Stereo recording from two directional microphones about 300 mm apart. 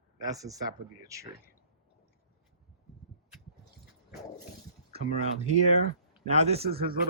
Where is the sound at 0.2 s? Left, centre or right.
Centre.